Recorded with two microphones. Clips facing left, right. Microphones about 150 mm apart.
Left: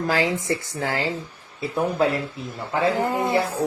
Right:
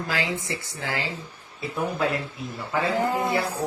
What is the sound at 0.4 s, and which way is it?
Speech, 45° left (ahead or behind).